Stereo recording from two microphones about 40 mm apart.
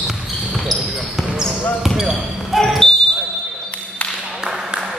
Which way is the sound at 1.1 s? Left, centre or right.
Centre.